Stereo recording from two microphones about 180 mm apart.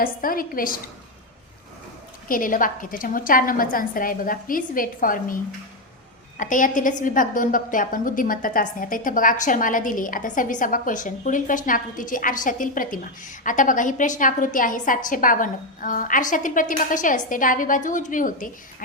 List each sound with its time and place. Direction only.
0.0 s a woman's voice: 50° left (ahead or behind)
2.2 s a woman's voice: 50° left (ahead or behind)